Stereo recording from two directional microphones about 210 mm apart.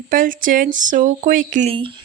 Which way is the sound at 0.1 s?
40° right (ahead or behind).